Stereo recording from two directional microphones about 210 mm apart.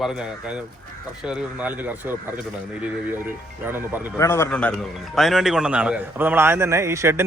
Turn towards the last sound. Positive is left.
turn(degrees=-10)  # may be behind; listen again after turning